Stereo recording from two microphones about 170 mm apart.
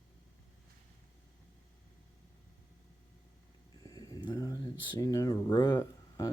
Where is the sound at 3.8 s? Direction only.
20° left (ahead or behind).